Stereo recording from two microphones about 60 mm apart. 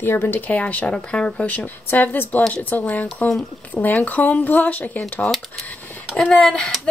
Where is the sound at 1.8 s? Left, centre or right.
Left.